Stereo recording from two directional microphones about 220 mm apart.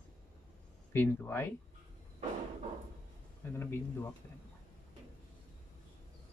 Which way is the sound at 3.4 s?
10° left (ahead or behind).